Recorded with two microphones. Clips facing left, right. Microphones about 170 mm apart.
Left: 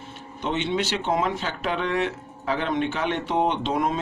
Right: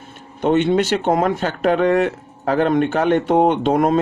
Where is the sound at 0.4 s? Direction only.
50° right (ahead or behind).